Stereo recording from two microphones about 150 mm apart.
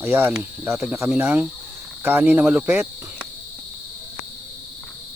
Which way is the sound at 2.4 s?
10° right (ahead or behind).